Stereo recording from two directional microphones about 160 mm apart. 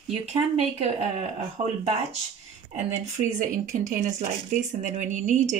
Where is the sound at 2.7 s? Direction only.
50° right (ahead or behind).